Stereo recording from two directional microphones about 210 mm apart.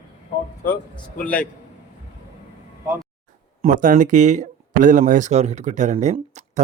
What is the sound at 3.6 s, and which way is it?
Speech, 40° right (ahead or behind).